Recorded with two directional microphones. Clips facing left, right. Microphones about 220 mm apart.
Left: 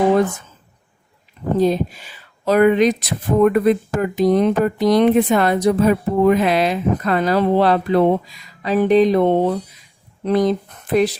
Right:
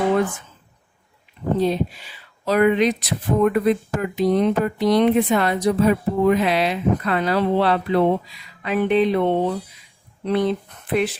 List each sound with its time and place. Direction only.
1.5 s speech: 45° left (ahead or behind)